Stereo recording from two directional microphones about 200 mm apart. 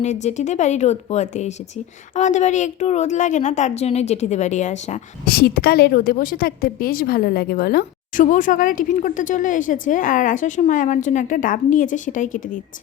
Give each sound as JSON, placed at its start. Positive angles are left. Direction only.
{"t": 0.0, "sound": "a woman's voice", "side_deg": 35}